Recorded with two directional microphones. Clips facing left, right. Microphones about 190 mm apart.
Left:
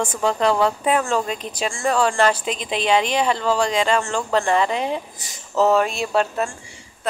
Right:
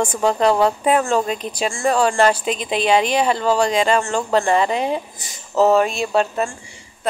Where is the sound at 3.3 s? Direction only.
40° right (ahead or behind).